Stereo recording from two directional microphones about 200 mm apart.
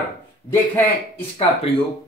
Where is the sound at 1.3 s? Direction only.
30° left (ahead or behind).